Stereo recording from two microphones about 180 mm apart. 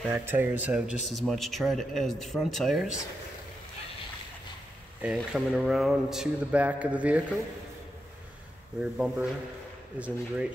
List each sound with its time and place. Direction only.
0.1 s speech: 10° right (ahead or behind)
5.0 s speech: 5° right (ahead or behind)
8.9 s speech: 5° right (ahead or behind)